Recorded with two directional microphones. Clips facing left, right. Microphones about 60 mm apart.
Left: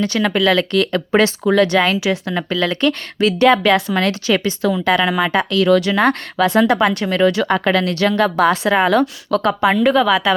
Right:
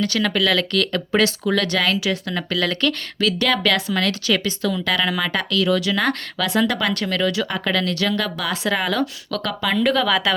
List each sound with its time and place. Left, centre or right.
0.0 s speech: left
5.6 s speech: left
5.9 s a woman's voice: left
7.4 s a woman's voice: left
9.7 s a woman's voice: centre